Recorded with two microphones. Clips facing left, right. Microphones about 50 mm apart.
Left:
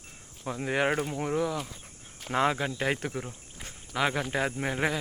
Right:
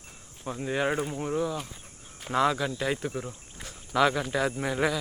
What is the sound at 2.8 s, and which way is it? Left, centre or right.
Speech, left.